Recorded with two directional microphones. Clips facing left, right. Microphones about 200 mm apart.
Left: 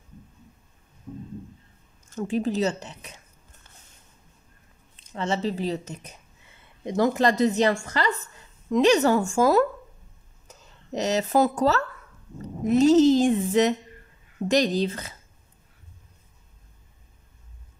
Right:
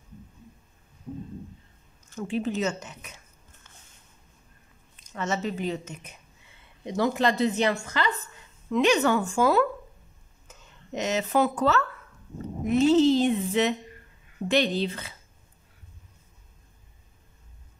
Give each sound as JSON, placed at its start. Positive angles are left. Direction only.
{"t": 2.1, "sound": "speech", "side_deg": 40}
{"t": 4.9, "sound": "a woman's voice", "side_deg": 30}